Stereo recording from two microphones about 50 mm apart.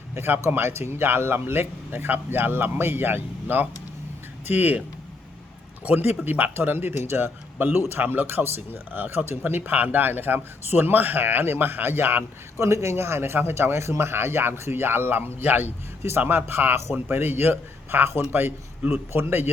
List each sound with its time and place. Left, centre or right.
0.1 s speech: right
5.9 s speech: right
8.5 s speech: right
12.5 s speech: right
18.9 s speech: right